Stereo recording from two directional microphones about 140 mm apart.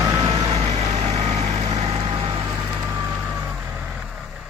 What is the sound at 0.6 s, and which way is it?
Vehicle, 50° right (ahead or behind).